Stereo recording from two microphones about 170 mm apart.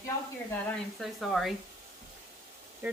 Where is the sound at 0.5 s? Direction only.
10° left (ahead or behind).